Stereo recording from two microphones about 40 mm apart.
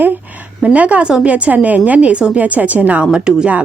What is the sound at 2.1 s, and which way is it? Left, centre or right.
Speech, centre.